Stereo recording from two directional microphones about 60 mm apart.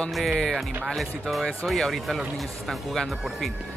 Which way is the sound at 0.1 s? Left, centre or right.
Centre.